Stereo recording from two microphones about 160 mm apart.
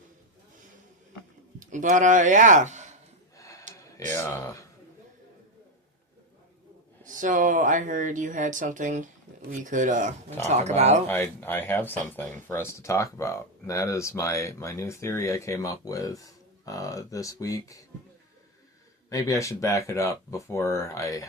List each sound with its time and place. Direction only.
1.5 s speech: 50° right (ahead or behind)
3.3 s a sound: 20° left (ahead or behind)
4.1 s speech: 15° left (ahead or behind)
7.0 s speech: 55° right (ahead or behind)
11.1 s speech: 15° left (ahead or behind)
19.1 s speech: 20° left (ahead or behind)